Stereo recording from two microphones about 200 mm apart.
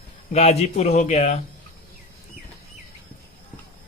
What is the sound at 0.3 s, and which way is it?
Speech, 30° left (ahead or behind).